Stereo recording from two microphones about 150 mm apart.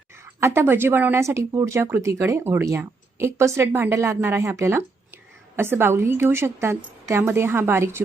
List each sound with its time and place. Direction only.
0.3 s a woman's voice: 15° right (ahead or behind)